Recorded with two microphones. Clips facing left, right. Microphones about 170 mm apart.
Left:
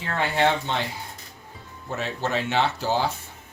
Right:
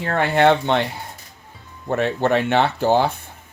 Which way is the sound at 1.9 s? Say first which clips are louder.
Right 9 dB; 60° right (ahead or behind).